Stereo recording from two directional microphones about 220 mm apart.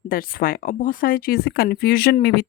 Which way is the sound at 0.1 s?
40° left (ahead or behind).